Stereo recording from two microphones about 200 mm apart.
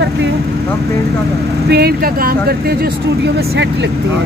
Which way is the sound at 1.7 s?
50° right (ahead or behind).